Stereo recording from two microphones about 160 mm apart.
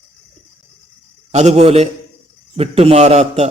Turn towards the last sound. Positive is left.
turn(degrees=-40)  # may be behind; listen again after turning